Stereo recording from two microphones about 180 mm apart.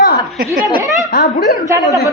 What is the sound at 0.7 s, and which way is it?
Speech, 20° right (ahead or behind).